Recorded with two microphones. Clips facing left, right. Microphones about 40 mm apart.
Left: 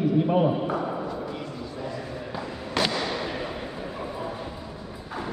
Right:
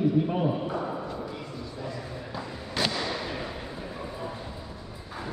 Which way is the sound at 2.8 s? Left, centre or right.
Centre.